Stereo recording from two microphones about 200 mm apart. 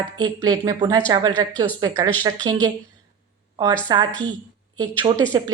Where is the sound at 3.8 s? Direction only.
20° right (ahead or behind).